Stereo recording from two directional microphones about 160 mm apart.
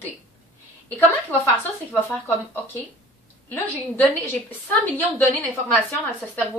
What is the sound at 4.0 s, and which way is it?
A woman's voice, 10° left (ahead or behind).